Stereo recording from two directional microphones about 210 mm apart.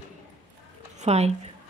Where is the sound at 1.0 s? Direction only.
30° right (ahead or behind).